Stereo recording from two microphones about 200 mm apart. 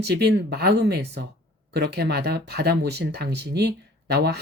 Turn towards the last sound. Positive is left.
turn(degrees=-55)  # may be behind; listen again after turning